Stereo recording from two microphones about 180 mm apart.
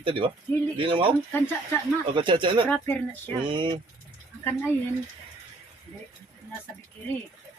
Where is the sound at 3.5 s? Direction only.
25° right (ahead or behind).